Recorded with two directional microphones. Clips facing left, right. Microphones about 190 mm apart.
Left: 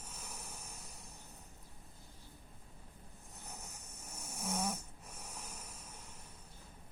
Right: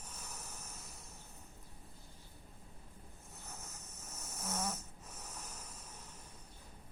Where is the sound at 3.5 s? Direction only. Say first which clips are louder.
Left 1 dB; 15° left (ahead or behind).